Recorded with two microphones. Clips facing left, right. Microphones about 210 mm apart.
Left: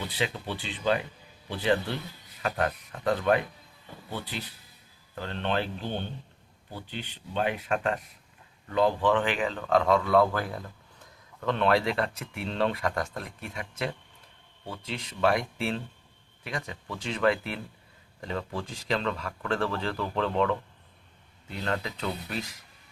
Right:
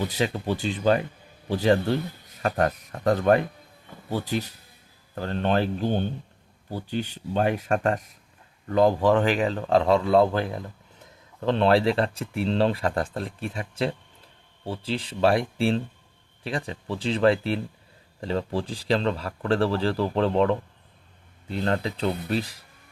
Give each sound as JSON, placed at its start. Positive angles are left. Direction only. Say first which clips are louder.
{"t": 0.0, "sound": "speech", "louder": "right 6 dB", "side_deg": -45}
{"t": 21.6, "sound": "speech", "louder": "right 6 dB", "side_deg": -35}